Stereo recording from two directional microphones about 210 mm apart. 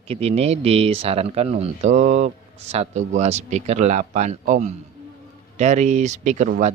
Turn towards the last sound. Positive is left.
turn(degrees=-35)  # may be behind; listen again after turning